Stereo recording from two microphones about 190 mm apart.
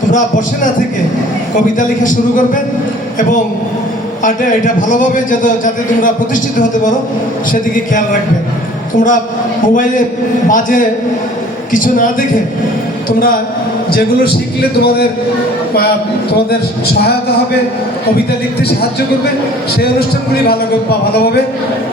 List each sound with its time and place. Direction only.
0.1 s a man's voice: 45° left (ahead or behind)
2.0 s a man's voice: 45° left (ahead or behind)
4.2 s a man's voice: 45° left (ahead or behind)
10.5 s a man's voice: 45° left (ahead or behind)
17.0 s a man's voice: 55° left (ahead or behind)